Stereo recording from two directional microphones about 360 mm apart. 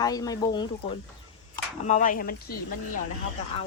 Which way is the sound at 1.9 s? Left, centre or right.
Left.